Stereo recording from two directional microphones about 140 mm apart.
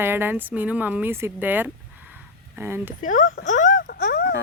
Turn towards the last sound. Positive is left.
turn(degrees=90)